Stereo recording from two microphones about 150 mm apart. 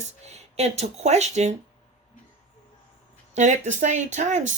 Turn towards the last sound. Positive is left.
turn(degrees=-55)  # may be behind; listen again after turning